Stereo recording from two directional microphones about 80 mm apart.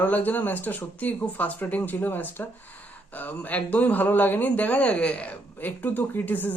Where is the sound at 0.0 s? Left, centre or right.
Left.